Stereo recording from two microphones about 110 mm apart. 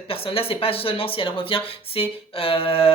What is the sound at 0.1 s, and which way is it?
Speech, 60° left (ahead or behind).